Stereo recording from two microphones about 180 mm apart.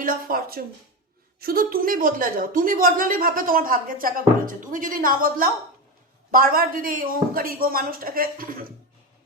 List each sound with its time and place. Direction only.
0.0 s a woman's voice: 50° right (ahead or behind)